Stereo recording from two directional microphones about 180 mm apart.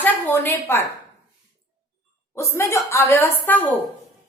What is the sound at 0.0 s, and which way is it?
Speech, 10° left (ahead or behind).